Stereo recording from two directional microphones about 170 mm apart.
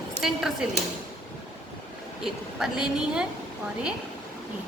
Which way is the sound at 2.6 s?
5° right (ahead or behind).